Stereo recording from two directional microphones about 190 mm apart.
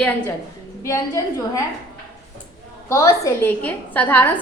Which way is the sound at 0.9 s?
15° left (ahead or behind).